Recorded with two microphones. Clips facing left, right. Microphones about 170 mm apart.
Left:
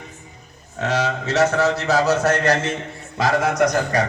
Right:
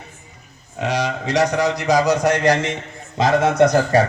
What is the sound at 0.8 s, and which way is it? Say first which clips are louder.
A man's voice: even; 15° right (ahead or behind).